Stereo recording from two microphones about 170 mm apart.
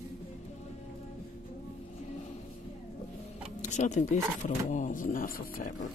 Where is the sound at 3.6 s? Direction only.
45° left (ahead or behind).